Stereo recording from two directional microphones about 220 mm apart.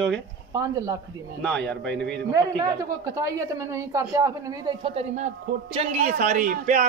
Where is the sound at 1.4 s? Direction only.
5° left (ahead or behind).